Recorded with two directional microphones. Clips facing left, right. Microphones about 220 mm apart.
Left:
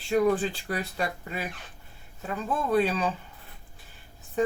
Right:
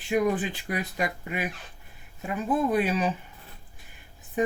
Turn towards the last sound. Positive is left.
turn(degrees=-15)  # may be behind; listen again after turning